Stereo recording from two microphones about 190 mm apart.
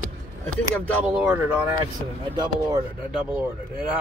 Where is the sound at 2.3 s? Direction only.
20° right (ahead or behind).